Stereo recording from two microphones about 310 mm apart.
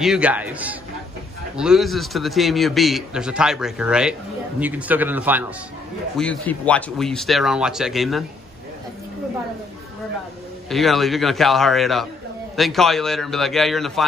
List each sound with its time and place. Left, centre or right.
0.0 s a man's voice: centre
10.7 s a man's voice: centre